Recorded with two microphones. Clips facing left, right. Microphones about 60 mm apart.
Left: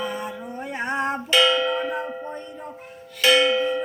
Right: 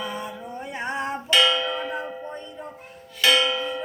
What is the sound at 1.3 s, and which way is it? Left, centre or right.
Music, left.